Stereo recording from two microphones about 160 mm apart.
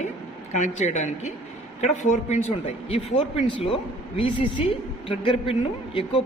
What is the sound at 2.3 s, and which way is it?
Speech, 40° left (ahead or behind).